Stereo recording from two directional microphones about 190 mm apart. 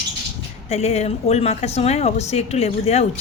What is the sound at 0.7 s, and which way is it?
A woman's voice, 35° left (ahead or behind).